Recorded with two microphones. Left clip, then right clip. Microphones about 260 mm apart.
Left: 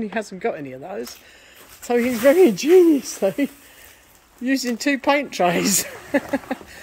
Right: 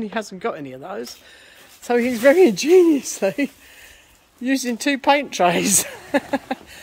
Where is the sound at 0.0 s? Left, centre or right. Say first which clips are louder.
Left 1 dB; centre.